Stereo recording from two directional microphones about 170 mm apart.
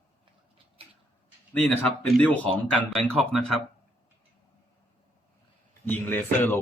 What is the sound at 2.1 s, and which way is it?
Speech, 10° left (ahead or behind).